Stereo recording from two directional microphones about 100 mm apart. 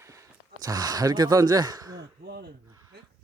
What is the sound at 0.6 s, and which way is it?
Speech, 40° right (ahead or behind).